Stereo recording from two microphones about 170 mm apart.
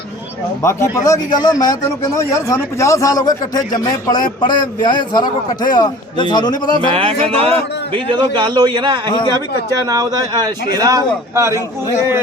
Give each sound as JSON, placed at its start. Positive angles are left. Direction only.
{"t": 0.6, "sound": "speech", "side_deg": 15}
{"t": 6.7, "sound": "a man's voice", "side_deg": -30}